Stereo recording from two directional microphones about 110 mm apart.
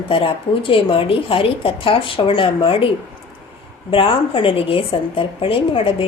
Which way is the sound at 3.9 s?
55° left (ahead or behind).